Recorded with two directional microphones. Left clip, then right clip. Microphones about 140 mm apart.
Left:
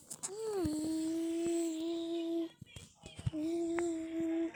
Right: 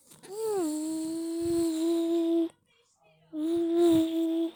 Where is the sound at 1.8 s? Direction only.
90° right.